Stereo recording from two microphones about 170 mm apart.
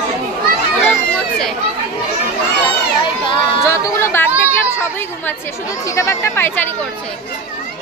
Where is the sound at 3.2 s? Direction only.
30° left (ahead or behind).